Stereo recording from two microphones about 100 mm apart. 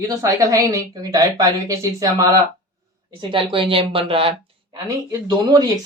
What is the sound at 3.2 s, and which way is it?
Speech, 55° right (ahead or behind).